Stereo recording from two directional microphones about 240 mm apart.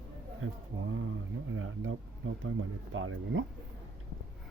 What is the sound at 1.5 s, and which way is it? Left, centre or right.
Speech, right.